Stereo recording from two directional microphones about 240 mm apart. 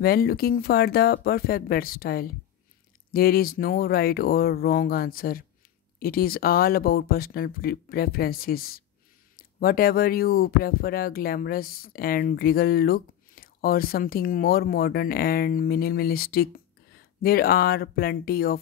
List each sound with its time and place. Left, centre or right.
0.0 s speech: left